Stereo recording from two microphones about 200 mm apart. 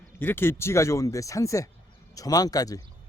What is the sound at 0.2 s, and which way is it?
Speech, 10° left (ahead or behind).